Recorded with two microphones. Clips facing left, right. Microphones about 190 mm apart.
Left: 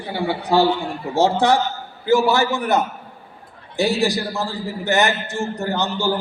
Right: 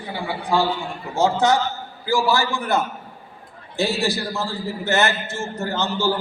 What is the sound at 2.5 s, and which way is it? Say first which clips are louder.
A man's voice: left 3 dB; 20° left (ahead or behind).